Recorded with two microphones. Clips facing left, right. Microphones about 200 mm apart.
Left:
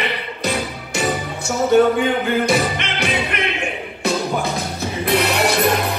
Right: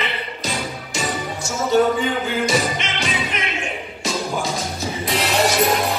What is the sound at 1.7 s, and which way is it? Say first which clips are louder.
Speech: left 3 dB; 60° left (ahead or behind).